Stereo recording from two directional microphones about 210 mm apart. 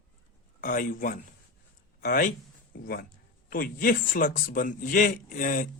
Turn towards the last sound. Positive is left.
turn(degrees=40)  # may be behind; listen again after turning